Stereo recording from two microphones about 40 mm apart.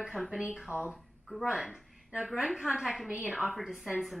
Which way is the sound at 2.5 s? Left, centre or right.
Centre.